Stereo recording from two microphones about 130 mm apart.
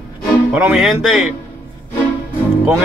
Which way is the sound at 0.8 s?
Centre (ahead or behind).